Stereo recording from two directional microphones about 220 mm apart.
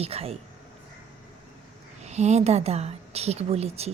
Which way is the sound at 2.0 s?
30° right (ahead or behind).